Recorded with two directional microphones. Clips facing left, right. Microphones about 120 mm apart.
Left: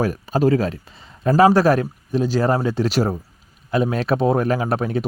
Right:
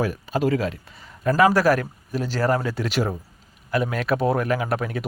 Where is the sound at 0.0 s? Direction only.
40° left (ahead or behind); by 2.6 s 20° left (ahead or behind).